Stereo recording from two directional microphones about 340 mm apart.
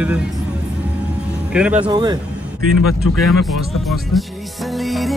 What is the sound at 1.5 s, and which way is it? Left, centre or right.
Speech, centre.